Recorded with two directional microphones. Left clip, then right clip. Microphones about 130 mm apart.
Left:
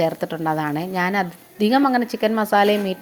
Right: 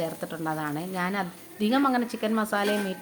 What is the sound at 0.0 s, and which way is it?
A woman's voice, 45° left (ahead or behind).